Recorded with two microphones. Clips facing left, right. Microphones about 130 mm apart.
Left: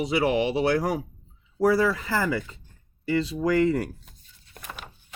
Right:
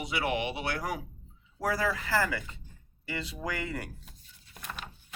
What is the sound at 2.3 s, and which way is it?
Speech, 35° left (ahead or behind).